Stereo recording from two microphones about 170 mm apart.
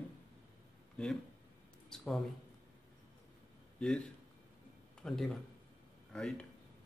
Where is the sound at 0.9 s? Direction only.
5° left (ahead or behind).